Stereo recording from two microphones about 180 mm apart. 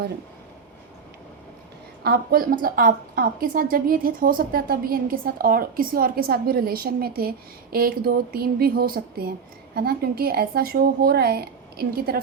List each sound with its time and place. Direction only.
2.0 s a woman's voice: 50° right (ahead or behind)